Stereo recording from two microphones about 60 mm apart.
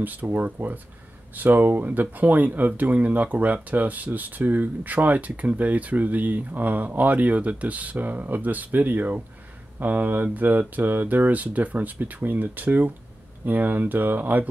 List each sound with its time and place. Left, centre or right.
0.0 s speech: right